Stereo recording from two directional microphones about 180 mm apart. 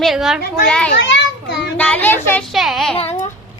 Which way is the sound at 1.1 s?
70° left (ahead or behind).